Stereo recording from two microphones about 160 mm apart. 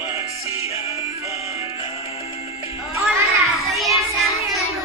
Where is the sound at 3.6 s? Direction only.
Centre (ahead or behind).